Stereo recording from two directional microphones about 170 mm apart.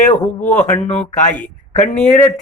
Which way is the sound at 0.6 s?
45° left (ahead or behind).